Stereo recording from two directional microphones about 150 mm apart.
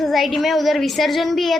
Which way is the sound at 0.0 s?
Centre (ahead or behind).